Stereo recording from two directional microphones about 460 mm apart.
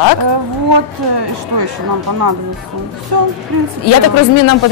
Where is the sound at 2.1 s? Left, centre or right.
Right.